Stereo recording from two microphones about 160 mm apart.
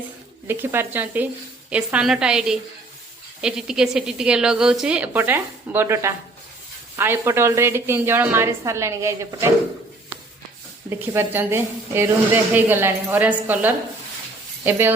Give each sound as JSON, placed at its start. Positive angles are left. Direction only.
{"t": 0.4, "sound": "a woman's voice", "side_deg": -15}
{"t": 10.8, "sound": "a woman's voice", "side_deg": -15}